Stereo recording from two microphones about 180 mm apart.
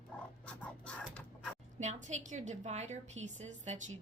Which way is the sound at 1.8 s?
40° right (ahead or behind).